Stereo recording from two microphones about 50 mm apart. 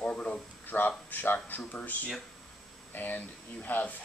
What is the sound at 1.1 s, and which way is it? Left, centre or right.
Speech, left.